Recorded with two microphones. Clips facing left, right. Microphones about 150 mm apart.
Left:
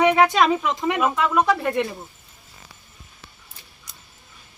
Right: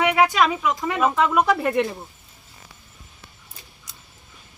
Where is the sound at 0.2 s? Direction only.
30° left (ahead or behind).